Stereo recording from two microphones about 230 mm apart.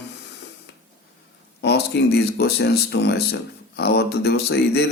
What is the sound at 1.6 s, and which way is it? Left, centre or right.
Speech, left.